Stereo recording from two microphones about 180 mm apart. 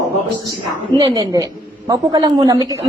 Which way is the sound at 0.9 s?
25° right (ahead or behind).